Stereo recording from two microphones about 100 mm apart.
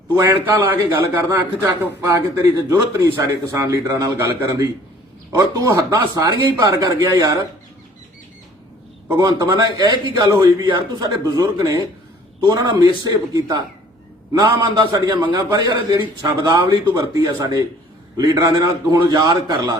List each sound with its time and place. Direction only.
0.6 s a man's voice: 20° right (ahead or behind)
5.4 s a man's voice: 35° right (ahead or behind)
9.1 s a man's voice: 45° right (ahead or behind)